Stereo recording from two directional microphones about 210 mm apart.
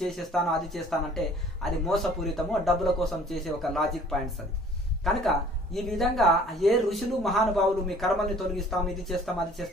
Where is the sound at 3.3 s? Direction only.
Centre (ahead or behind).